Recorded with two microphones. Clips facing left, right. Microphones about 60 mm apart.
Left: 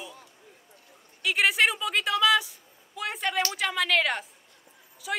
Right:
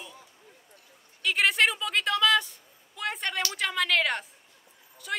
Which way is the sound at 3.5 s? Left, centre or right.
Centre.